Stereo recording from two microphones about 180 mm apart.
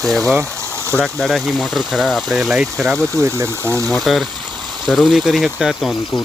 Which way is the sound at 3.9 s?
Centre (ahead or behind).